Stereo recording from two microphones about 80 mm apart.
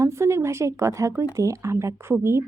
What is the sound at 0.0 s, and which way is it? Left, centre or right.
Speech, right.